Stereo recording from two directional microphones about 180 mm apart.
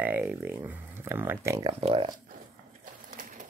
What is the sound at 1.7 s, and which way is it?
Speech, 35° right (ahead or behind).